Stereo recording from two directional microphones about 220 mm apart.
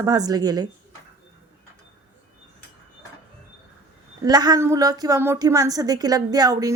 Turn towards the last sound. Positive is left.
turn(degrees=-15)  # may be behind; listen again after turning